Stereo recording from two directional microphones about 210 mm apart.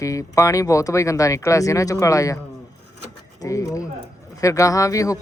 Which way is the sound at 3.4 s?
15° left (ahead or behind).